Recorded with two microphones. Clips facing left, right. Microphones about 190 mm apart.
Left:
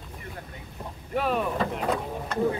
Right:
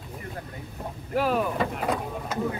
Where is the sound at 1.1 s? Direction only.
Centre (ahead or behind).